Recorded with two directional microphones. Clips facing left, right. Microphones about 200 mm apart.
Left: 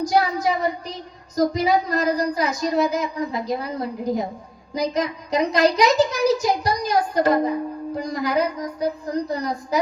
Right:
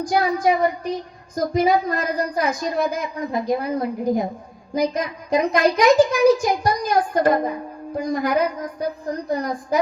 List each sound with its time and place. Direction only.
0.0 s a woman's voice: 50° right (ahead or behind)